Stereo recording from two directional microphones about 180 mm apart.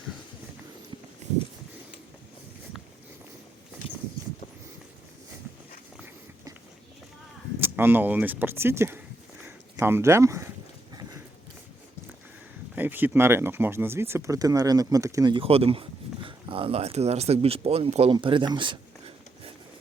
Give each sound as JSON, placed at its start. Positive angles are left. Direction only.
{"t": 7.6, "sound": "speech", "side_deg": -10}
{"t": 9.4, "sound": "a sound", "side_deg": -10}
{"t": 12.7, "sound": "speech", "side_deg": -10}